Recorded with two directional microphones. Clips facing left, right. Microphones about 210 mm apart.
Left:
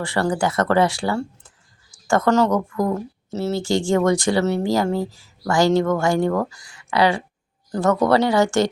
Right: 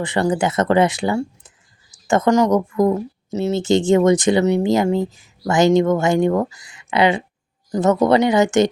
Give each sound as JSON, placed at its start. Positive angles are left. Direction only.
{"t": 0.0, "sound": "speech", "side_deg": -20}